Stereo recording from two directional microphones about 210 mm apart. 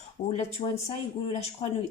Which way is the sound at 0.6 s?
35° left (ahead or behind).